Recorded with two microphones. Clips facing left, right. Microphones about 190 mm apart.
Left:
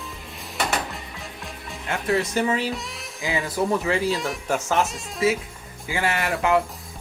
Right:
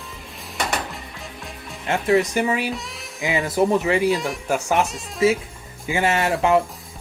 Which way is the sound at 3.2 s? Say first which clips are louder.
Right 5 dB; 20° right (ahead or behind).